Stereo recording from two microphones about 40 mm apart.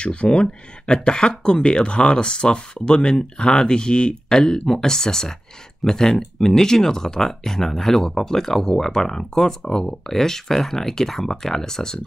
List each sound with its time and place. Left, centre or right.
0.0 s speech: left